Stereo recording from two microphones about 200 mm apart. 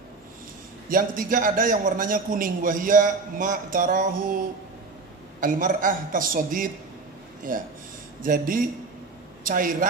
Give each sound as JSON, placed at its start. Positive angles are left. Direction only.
{"t": 0.8, "sound": "a man's voice", "side_deg": -45}
{"t": 5.4, "sound": "a man's voice", "side_deg": -40}